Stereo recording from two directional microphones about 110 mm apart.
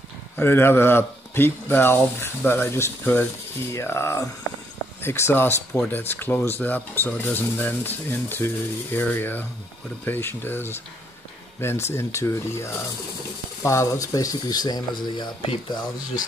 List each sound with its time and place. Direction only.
0.4 s speech: 20° left (ahead or behind); by 15.8 s 50° left (ahead or behind)